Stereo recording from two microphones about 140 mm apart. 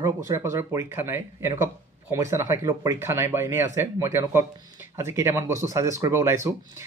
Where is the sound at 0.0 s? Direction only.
20° right (ahead or behind).